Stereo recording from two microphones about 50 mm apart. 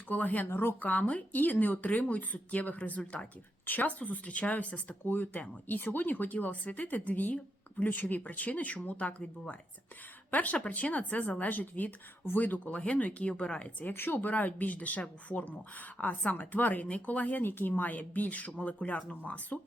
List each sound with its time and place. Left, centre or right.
0.1 s speech: left
0.4 s speech: left
0.8 s speech: left
13.8 s speech: left